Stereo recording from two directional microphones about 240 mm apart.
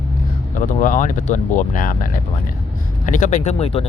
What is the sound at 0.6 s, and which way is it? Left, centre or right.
Speech, left.